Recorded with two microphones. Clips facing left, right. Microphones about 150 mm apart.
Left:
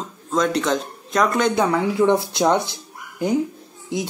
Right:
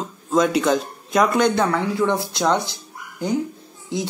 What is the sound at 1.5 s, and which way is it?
Speech, 10° left (ahead or behind).